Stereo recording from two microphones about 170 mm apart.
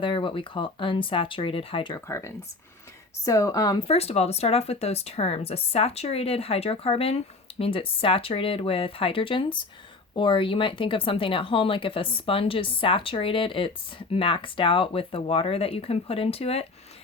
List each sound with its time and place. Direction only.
0.0 s speech: 30° left (ahead or behind)
2.0 s speech: 15° left (ahead or behind)
3.8 s speech: 35° left (ahead or behind)